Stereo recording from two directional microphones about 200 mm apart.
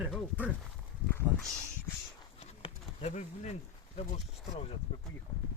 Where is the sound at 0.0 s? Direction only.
Centre (ahead or behind).